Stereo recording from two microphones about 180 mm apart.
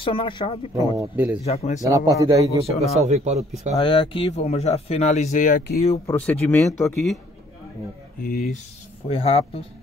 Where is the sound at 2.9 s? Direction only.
35° right (ahead or behind).